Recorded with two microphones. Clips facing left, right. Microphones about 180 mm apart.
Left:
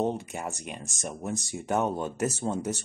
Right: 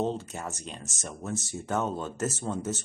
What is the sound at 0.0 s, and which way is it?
Speech, 15° left (ahead or behind).